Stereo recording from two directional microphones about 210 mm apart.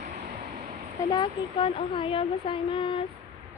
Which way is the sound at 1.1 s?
25° left (ahead or behind).